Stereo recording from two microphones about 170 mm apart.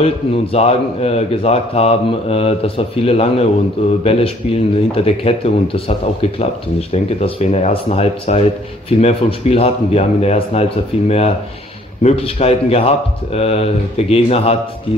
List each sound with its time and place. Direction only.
0.0 s speech: 40° left (ahead or behind)